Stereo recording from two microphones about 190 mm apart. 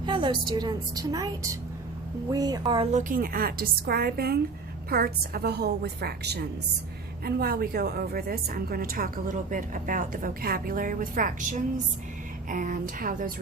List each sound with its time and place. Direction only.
0.0 s a woman's voice: 25° right (ahead or behind)
2.9 s a woman's voice: 45° right (ahead or behind)